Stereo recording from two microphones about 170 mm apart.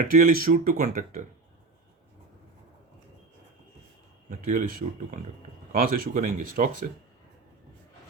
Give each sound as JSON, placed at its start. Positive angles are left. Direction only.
{"t": 0.0, "sound": "speech", "side_deg": -50}
{"t": 4.3, "sound": "speech", "side_deg": -50}